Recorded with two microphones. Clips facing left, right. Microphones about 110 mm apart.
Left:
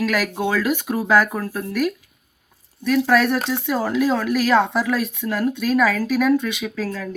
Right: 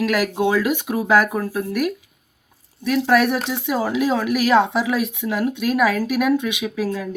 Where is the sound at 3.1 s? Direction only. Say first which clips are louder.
Right 3 dB; 10° right (ahead or behind).